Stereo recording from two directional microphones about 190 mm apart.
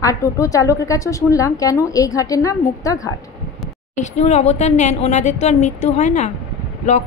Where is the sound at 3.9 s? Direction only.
40° left (ahead or behind).